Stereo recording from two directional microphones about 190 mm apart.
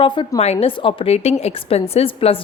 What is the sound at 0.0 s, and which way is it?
A woman's voice, 25° left (ahead or behind).